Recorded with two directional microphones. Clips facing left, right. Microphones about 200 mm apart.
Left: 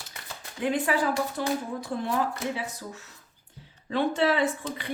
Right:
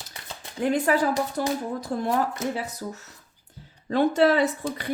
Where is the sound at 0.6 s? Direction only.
40° right (ahead or behind).